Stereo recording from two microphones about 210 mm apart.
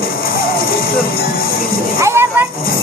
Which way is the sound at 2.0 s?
10° right (ahead or behind).